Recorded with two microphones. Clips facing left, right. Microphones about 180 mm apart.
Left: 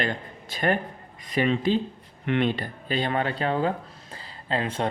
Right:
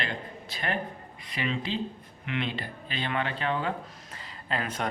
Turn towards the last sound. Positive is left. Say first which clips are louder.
# left 5 dB
turn(degrees=30)  # may be behind; listen again after turning